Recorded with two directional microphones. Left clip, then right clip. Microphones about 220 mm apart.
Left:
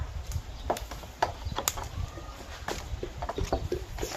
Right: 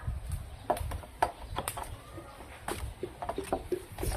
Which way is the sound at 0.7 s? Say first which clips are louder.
Even; 15° right (ahead or behind).